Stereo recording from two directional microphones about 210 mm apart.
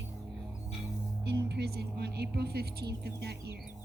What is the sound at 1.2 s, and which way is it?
Speech, 55° right (ahead or behind).